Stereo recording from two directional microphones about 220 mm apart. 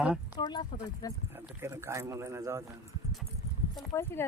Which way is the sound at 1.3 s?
10° right (ahead or behind).